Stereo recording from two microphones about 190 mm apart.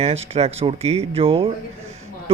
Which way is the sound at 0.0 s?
30° right (ahead or behind).